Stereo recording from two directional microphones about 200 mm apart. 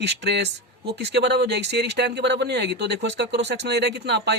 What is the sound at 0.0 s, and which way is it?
Speech, 55° right (ahead or behind).